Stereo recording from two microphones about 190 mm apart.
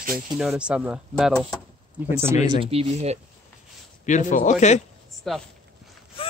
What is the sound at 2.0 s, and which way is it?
Speech, 35° left (ahead or behind).